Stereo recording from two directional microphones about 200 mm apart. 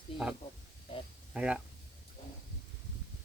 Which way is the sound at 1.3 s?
5° right (ahead or behind).